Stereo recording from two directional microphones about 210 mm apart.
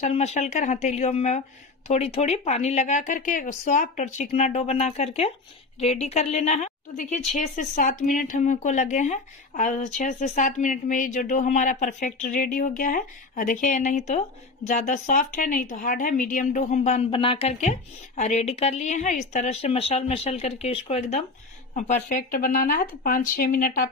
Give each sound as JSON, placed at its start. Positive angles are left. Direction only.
{"t": 0.0, "sound": "speech", "side_deg": 30}